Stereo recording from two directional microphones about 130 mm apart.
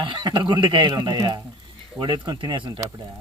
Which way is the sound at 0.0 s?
35° right (ahead or behind).